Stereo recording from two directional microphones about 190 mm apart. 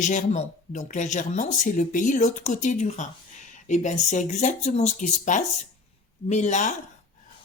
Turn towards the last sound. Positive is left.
turn(degrees=40)  # may be behind; listen again after turning